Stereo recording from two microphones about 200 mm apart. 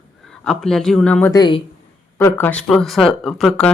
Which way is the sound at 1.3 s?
20° left (ahead or behind).